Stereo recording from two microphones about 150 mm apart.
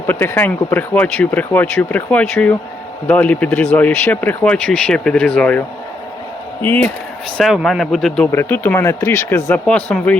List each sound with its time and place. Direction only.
0.1 s speech: 15° left (ahead or behind)
7.3 s speech: centre (ahead or behind)
8.3 s speech: 15° left (ahead or behind)